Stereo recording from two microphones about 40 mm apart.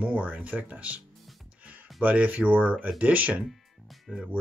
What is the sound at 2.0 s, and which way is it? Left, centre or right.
Speech, right.